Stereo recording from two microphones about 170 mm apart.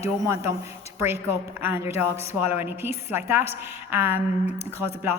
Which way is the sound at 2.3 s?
15° right (ahead or behind).